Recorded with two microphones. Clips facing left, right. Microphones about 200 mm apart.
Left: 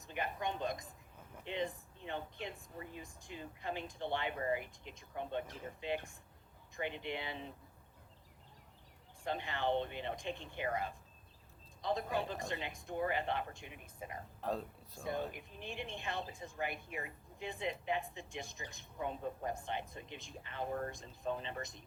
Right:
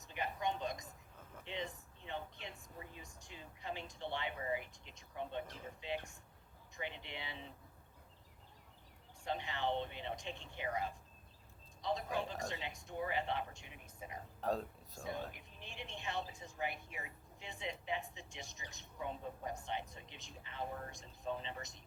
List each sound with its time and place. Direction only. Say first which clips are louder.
0.1 s a sound: even; 55° left (ahead or behind)
1.5 s a woman's voice: left 5 dB; 55° left (ahead or behind)
9.2 s a woman's voice: left 2 dB; 55° left (ahead or behind)
14.4 s speech: right 1 dB; centre (ahead or behind)
15.0 s a woman's voice: left 5 dB; 55° left (ahead or behind)